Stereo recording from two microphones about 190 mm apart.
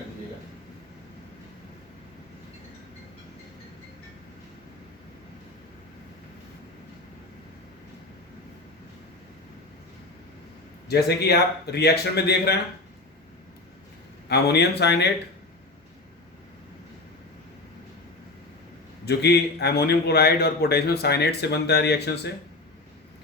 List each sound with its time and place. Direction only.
10.8 s a man's voice: 55° left (ahead or behind)
14.3 s a man's voice: 60° left (ahead or behind)
19.0 s a man's voice: 60° left (ahead or behind)